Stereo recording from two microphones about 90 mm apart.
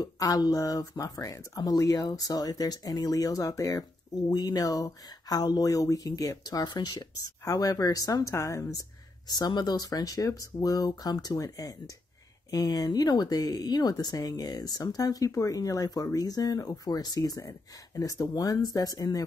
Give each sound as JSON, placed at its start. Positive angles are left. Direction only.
{"t": 0.0, "sound": "speech", "side_deg": 45}
{"t": 9.3, "sound": "speech", "side_deg": 50}